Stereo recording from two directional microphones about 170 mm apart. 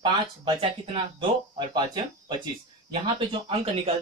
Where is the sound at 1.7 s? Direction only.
25° right (ahead or behind).